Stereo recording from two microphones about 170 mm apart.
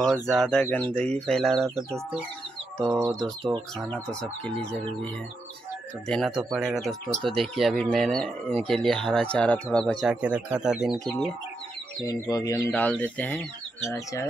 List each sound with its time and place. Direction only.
0.0 s speech: centre (ahead or behind)
3.2 s speech: centre (ahead or behind)
6.0 s speech: centre (ahead or behind)
12.0 s speech: 20° left (ahead or behind)